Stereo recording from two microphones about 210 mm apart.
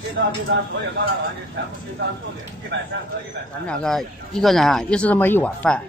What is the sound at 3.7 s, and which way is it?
Speech, 5° left (ahead or behind).